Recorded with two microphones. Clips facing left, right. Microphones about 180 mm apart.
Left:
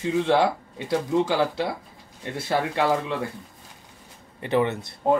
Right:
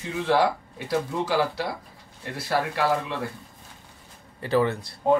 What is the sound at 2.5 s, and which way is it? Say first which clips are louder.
Speech: left 1 dB; 20° left (ahead or behind).